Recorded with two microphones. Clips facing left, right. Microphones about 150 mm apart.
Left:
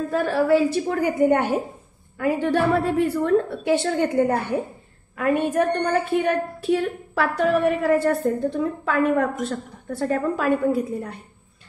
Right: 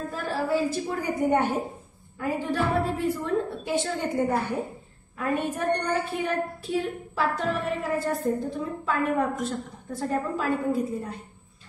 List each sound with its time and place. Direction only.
0.1 s a woman's voice: 70° left (ahead or behind)
5.1 s a woman's voice: 80° left